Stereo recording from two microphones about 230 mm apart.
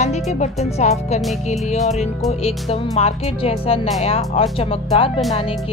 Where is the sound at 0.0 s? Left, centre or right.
Left.